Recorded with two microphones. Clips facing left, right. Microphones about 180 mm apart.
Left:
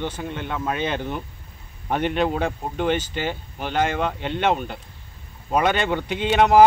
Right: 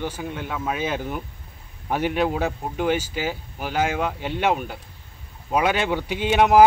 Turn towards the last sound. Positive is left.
turn(degrees=-5)  # may be behind; listen again after turning